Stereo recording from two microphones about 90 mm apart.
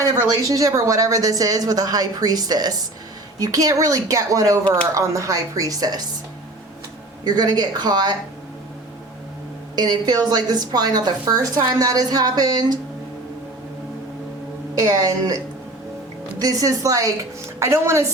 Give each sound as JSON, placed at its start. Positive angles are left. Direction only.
{"t": 0.0, "sound": "a woman's voice", "side_deg": -40}
{"t": 7.3, "sound": "a woman's voice", "side_deg": -50}
{"t": 9.7, "sound": "a woman's voice", "side_deg": -50}
{"t": 14.8, "sound": "a woman's voice", "side_deg": -40}
{"t": 16.4, "sound": "speech", "side_deg": -40}